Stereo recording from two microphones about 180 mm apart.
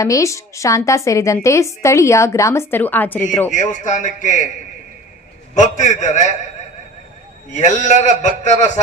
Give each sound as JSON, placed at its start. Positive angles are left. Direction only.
{"t": 0.0, "sound": "a woman's voice", "side_deg": 20}
{"t": 3.5, "sound": "a man's voice", "side_deg": 45}
{"t": 5.5, "sound": "a man's voice", "side_deg": 40}
{"t": 7.5, "sound": "a man's voice", "side_deg": 40}